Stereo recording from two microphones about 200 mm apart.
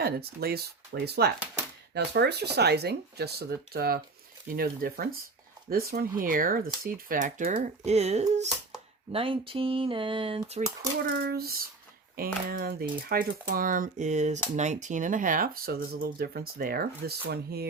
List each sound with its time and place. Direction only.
0.0 s speech: 50° right (ahead or behind); by 10.6 s 25° right (ahead or behind)
11.0 s speech: 50° right (ahead or behind)